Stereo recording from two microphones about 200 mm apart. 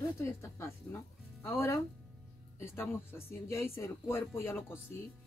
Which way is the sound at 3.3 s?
15° left (ahead or behind).